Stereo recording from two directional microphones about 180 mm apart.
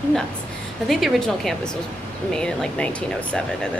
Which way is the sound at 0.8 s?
Centre (ahead or behind).